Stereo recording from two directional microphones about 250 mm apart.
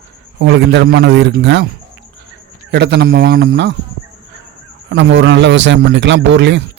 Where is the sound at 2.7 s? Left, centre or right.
Right.